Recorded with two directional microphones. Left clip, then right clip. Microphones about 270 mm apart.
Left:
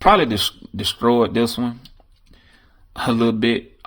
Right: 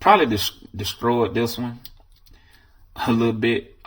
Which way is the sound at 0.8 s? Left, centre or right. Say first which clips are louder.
Left 4 dB; left.